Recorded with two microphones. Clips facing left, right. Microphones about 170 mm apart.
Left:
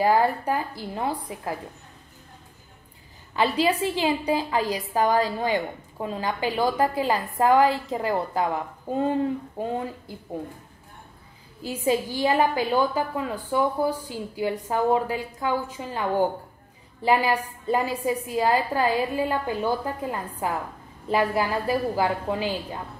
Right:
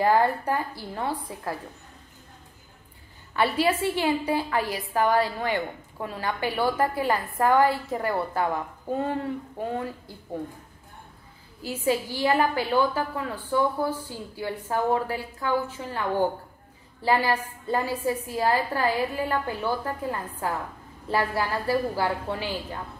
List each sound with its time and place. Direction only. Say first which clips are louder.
0.0 s a woman's voice: left 1 dB; 15° left (ahead or behind)
3.3 s a woman's voice: left 1 dB; 20° left (ahead or behind)
11.6 s a woman's voice: left 2 dB; 20° left (ahead or behind)